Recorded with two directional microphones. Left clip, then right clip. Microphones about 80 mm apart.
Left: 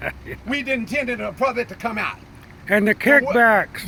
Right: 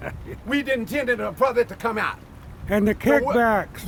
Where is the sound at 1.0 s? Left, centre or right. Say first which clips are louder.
Right 2 dB; right.